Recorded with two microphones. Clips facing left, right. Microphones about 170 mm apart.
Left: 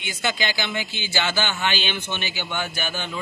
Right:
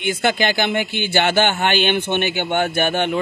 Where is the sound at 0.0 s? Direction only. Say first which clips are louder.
Right 8 dB; 55° right (ahead or behind).